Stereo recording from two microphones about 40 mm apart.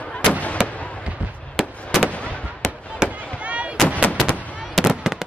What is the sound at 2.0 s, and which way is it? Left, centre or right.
Fireworks, left.